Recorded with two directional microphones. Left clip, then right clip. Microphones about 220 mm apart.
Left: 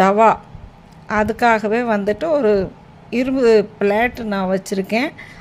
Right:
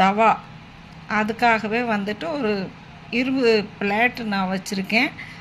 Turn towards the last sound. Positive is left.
turn(degrees=55)  # may be behind; listen again after turning